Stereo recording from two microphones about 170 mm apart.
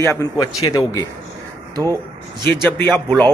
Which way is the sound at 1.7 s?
20° right (ahead or behind).